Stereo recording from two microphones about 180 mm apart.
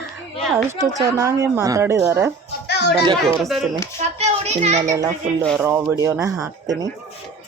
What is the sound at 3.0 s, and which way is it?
Speech, 25° right (ahead or behind).